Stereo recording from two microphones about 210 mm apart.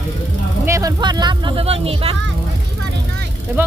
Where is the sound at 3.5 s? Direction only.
10° right (ahead or behind).